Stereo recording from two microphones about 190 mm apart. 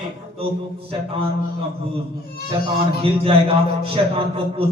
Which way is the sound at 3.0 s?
30° right (ahead or behind).